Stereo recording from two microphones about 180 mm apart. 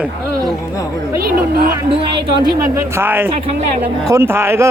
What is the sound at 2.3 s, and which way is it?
Speech, 15° right (ahead or behind).